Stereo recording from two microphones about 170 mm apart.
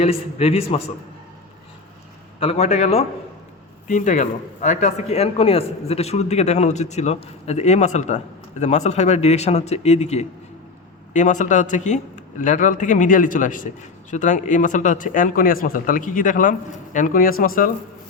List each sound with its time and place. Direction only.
0.0 s speech: 35° left (ahead or behind)
2.4 s a man's voice: 35° left (ahead or behind); by 17.7 s 55° left (ahead or behind)